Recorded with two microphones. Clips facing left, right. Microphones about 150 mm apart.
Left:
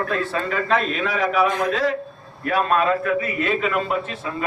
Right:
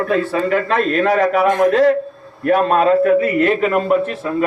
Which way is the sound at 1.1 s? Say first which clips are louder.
Right 2 dB; 55° right (ahead or behind).